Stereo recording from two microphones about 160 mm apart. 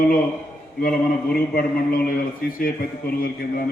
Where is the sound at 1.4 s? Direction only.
65° left (ahead or behind).